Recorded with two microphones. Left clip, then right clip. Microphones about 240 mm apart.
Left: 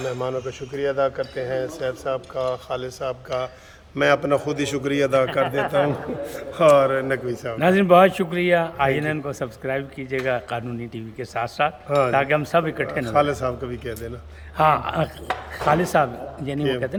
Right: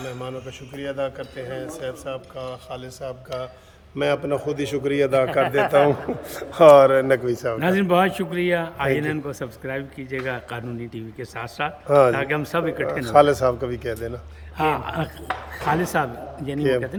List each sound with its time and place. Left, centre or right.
0.8 s a man's voice: left; by 5.5 s centre
5.5 s a man's voice: right
6.3 s a man's voice: right
7.6 s a man's voice: centre
11.9 s a man's voice: right
12.1 s a man's voice: centre
13.0 s a man's voice: right
14.6 s a man's voice: centre
16.6 s a man's voice: right